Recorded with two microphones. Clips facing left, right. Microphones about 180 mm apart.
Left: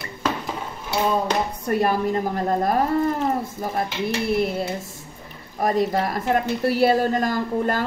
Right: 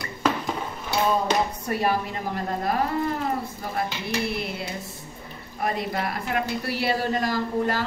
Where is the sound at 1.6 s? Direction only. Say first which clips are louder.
Left 4 dB; 50° left (ahead or behind).